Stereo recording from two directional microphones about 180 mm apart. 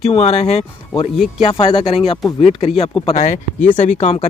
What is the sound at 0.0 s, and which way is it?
Speech, 35° left (ahead or behind).